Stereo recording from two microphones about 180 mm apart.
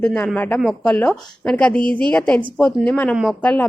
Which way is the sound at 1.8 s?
25° right (ahead or behind).